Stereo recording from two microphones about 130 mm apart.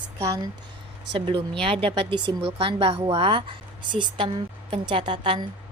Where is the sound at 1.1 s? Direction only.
40° right (ahead or behind).